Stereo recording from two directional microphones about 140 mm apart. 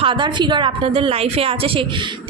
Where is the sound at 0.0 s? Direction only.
35° right (ahead or behind).